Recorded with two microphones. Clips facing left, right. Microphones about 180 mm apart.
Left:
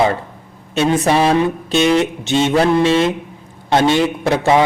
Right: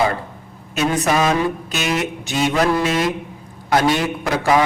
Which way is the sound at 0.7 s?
30° left (ahead or behind).